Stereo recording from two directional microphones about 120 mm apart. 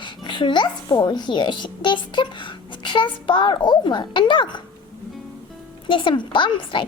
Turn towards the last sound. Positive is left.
turn(degrees=45)  # may be behind; listen again after turning